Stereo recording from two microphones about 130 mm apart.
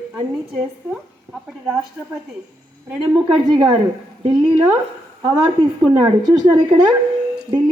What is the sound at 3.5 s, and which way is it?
Speech, 35° right (ahead or behind).